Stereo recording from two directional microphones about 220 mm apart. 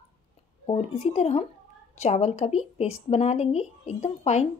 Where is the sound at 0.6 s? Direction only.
25° left (ahead or behind).